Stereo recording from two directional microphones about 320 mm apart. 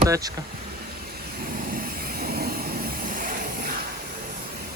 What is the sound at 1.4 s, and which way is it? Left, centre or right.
Vehicle, right.